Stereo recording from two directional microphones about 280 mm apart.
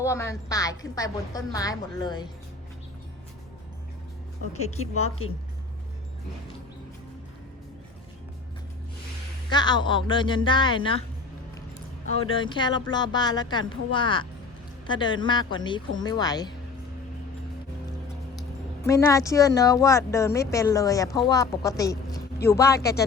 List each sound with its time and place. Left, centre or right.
0.0 s speech: centre
4.8 s a woman's voice: left
9.5 s speech: centre
12.2 s a man's voice: centre
18.9 s speech: centre
22.8 s speech: left